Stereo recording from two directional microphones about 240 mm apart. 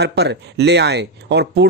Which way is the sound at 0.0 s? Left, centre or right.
Right.